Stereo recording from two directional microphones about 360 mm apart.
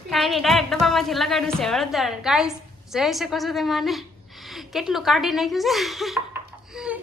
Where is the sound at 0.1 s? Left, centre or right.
Centre.